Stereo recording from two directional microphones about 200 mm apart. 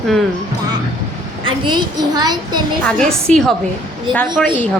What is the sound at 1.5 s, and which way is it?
A child's voice, 20° right (ahead or behind).